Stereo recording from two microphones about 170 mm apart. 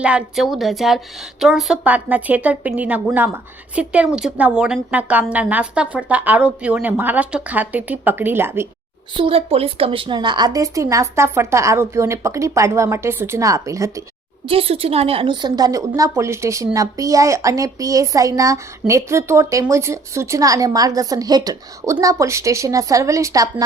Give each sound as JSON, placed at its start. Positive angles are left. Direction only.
{"t": 0.0, "sound": "a woman's voice", "side_deg": -5}
{"t": 9.1, "sound": "a woman's voice", "side_deg": -30}
{"t": 14.4, "sound": "a woman's voice", "side_deg": -35}